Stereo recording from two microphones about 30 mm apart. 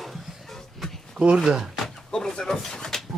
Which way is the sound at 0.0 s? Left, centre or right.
Centre.